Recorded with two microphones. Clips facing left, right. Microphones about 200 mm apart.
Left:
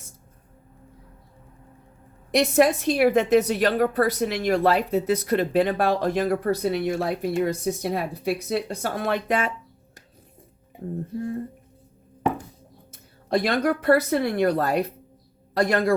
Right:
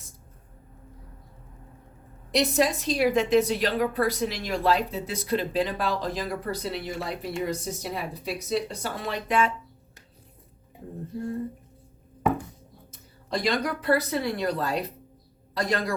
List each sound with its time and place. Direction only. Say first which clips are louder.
2.3 s a woman's voice: left 5 dB; 55° left (ahead or behind)
13.3 s a woman's voice: left 5 dB; 60° left (ahead or behind)